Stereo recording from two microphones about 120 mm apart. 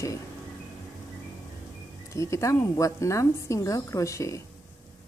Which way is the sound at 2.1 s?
25° left (ahead or behind).